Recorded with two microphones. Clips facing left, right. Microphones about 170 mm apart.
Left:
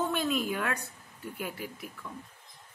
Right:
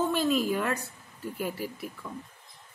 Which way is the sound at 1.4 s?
40° right (ahead or behind).